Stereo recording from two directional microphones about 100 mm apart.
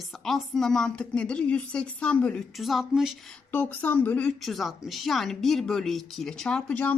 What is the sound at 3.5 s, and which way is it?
Speech, 15° left (ahead or behind).